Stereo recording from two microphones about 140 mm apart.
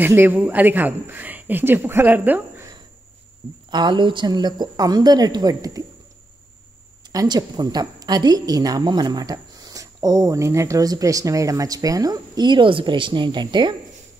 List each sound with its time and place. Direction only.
0.0 s a woman's voice: 15° right (ahead or behind)
3.7 s a woman's voice: 35° right (ahead or behind)
7.1 s a woman's voice: 25° right (ahead or behind)